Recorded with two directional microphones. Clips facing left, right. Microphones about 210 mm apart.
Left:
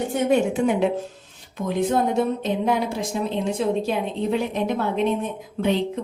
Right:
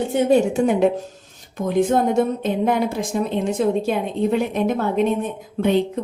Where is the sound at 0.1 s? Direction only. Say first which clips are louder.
Right 4 dB; 35° right (ahead or behind).